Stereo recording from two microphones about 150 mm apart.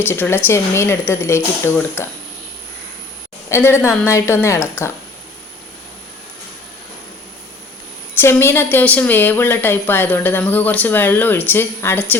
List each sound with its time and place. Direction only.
0.1 s a woman's voice: 15° left (ahead or behind)
3.5 s a woman's voice: 15° left (ahead or behind)
8.2 s a woman's voice: 15° left (ahead or behind)